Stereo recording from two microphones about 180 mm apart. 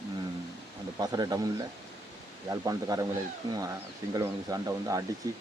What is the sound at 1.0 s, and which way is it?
Speech, 20° right (ahead or behind).